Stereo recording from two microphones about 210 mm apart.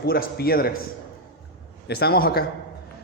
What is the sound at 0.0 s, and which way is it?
Speech, 45° left (ahead or behind).